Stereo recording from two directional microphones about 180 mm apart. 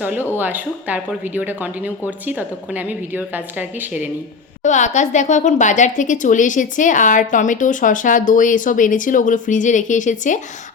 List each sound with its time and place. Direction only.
0.0 s speech: 10° right (ahead or behind)
4.6 s speech: 40° left (ahead or behind)